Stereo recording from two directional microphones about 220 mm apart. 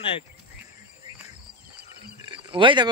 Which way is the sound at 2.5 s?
20° right (ahead or behind).